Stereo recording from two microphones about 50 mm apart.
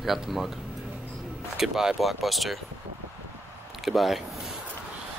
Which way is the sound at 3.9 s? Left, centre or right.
Centre.